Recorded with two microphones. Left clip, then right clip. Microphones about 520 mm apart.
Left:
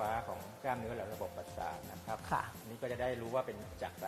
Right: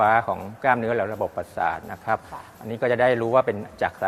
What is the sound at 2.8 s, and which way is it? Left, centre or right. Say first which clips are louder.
A man's voice: right 18 dB; right.